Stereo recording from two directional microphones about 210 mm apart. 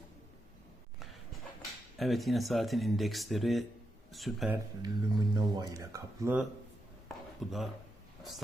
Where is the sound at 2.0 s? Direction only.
Centre (ahead or behind).